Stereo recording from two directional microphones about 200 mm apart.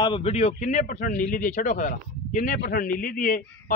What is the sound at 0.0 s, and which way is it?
Speech, 25° left (ahead or behind).